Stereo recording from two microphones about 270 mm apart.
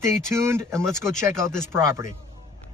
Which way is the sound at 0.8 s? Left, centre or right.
Centre.